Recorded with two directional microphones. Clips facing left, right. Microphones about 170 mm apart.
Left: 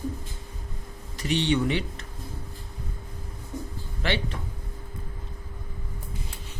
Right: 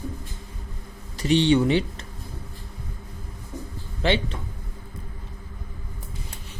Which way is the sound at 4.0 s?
25° right (ahead or behind).